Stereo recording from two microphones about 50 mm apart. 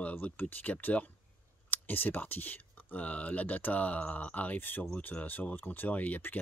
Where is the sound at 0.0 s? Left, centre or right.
Left.